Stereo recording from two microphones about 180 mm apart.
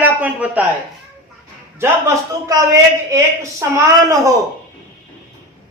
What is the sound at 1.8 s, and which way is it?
A man's voice, 15° right (ahead or behind).